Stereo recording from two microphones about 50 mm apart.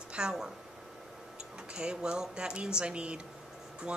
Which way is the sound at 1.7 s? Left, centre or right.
Centre.